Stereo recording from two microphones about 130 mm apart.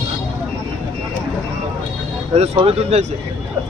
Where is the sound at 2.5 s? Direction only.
50° right (ahead or behind).